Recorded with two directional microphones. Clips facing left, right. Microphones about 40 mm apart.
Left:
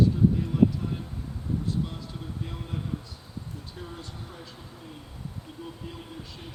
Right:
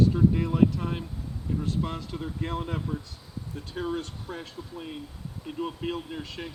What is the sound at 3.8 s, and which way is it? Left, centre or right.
Speech, right.